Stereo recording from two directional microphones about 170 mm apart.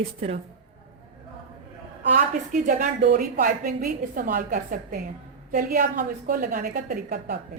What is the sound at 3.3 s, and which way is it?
A woman's voice, 60° right (ahead or behind).